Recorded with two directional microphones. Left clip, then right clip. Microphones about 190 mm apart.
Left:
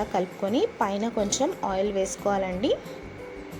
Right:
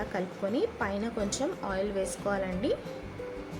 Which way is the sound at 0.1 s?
15° left (ahead or behind).